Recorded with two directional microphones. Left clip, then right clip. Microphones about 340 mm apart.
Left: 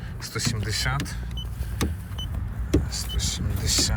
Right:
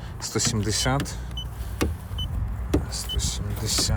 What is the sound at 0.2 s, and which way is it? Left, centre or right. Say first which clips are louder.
Speech: right 3 dB; centre.